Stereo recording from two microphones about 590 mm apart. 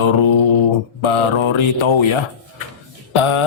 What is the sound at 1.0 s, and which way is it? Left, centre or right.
A man's voice, left.